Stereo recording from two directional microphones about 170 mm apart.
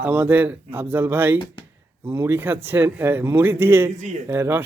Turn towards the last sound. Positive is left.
turn(degrees=-15)  # may be behind; listen again after turning